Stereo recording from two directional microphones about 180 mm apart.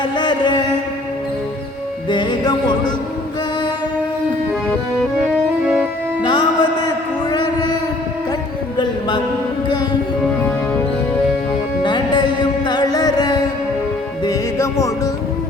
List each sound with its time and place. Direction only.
0.0 s music: 25° left (ahead or behind)
2.0 s music: 25° left (ahead or behind)
5.3 s music: 5° right (ahead or behind)
6.2 s music: 25° left (ahead or behind)
8.8 s mantra: 25° left (ahead or behind)
11.8 s music: 25° left (ahead or behind)